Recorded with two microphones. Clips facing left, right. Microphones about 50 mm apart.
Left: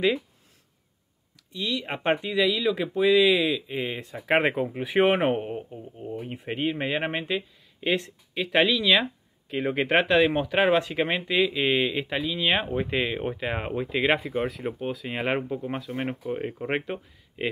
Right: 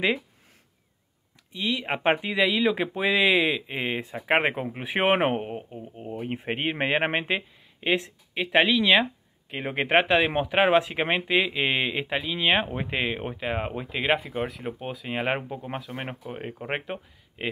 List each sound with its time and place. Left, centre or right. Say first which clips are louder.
1.5 s speech: right 2 dB; right
4.3 s speech: left 1 dB; centre
6.2 s speech: right 1 dB; right
7.8 s speech: right 1 dB; centre